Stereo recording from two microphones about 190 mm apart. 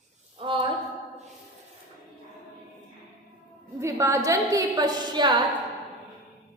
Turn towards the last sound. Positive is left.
turn(degrees=-20)  # may be behind; listen again after turning